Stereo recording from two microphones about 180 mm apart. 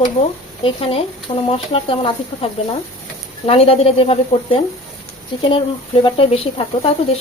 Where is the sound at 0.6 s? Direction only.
30° left (ahead or behind).